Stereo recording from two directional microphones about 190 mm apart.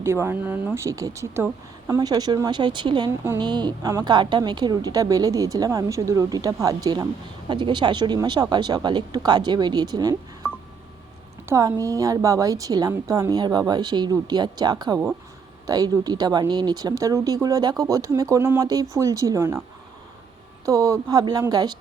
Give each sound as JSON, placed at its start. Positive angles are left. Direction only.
{"t": 0.0, "sound": "a woman's voice", "side_deg": -15}
{"t": 11.4, "sound": "a woman's voice", "side_deg": -15}
{"t": 20.7, "sound": "a woman's voice", "side_deg": -15}